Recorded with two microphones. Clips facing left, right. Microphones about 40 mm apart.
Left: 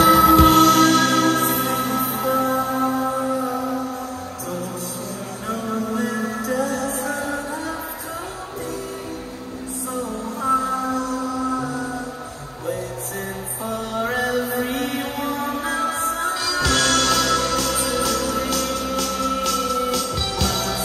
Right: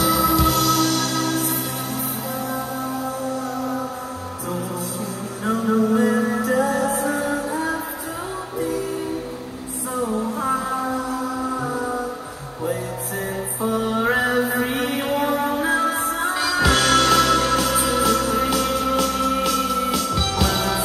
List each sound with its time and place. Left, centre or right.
0.0 s music: left
3.3 s music: centre
5.4 s music: centre
10.4 s music: centre
13.6 s music: centre